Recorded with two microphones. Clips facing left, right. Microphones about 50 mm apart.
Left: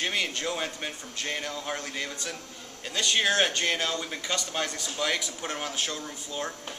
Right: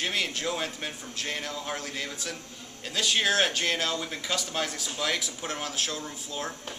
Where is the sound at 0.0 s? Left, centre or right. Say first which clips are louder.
Even; centre.